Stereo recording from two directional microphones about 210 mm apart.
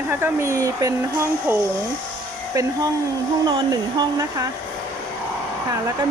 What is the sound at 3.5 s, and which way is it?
Speech, 20° right (ahead or behind).